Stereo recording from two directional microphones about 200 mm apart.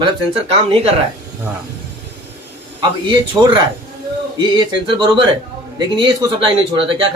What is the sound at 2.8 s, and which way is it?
Speech, 20° right (ahead or behind).